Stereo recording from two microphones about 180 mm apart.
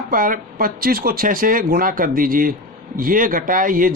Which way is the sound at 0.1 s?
50° right (ahead or behind).